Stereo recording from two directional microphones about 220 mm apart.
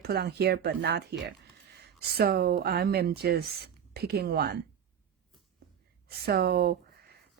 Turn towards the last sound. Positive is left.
turn(degrees=-45)  # may be behind; listen again after turning